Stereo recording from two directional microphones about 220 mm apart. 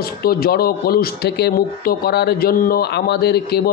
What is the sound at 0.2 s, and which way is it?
A man's voice, 45° left (ahead or behind).